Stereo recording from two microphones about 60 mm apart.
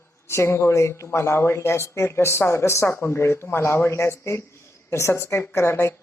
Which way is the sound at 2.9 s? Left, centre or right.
Left.